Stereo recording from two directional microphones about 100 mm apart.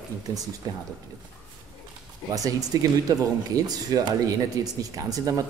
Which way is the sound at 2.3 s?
35° right (ahead or behind).